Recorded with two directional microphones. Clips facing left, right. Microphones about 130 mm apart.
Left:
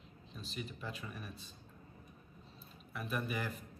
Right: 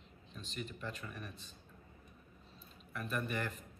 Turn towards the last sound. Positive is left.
turn(degrees=5)  # may be behind; listen again after turning